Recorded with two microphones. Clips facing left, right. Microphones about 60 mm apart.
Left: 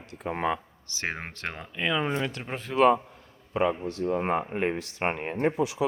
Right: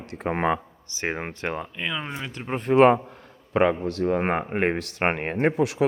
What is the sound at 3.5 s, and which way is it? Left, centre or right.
Speech, right.